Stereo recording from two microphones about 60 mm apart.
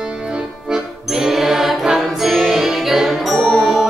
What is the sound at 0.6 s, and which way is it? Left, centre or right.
Music, centre.